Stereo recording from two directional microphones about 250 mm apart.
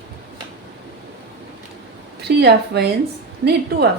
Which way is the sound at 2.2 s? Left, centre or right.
Right.